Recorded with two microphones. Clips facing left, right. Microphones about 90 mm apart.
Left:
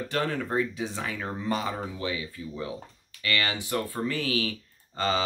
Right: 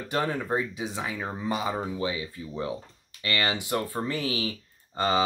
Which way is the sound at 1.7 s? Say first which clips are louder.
Right 2 dB; 25° right (ahead or behind).